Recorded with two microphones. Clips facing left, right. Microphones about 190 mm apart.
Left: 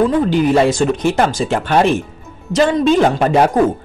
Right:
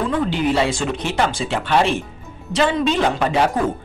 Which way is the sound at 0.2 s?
45° left (ahead or behind).